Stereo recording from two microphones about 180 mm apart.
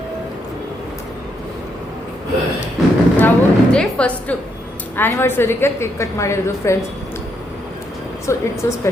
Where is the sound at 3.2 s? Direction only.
5° left (ahead or behind).